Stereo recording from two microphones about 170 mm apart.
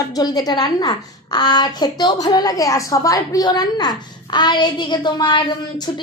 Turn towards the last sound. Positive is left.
turn(degrees=25)  # may be behind; listen again after turning